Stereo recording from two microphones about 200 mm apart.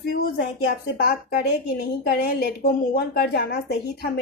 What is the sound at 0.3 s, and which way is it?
A woman's voice, 50° left (ahead or behind).